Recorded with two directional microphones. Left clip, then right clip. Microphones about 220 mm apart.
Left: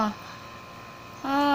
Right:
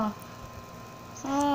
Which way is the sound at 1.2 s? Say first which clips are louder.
Left 3 dB; 15° left (ahead or behind).